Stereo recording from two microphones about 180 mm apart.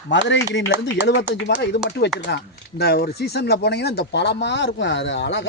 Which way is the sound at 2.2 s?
65° left (ahead or behind).